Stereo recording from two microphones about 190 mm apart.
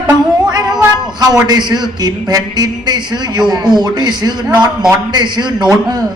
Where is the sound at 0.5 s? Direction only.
20° right (ahead or behind).